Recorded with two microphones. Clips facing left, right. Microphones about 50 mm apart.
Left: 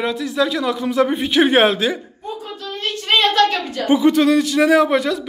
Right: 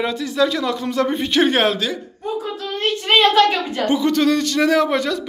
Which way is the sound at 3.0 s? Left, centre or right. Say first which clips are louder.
Right 2 dB; centre.